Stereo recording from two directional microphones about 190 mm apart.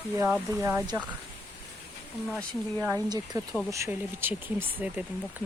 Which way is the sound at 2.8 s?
15° right (ahead or behind).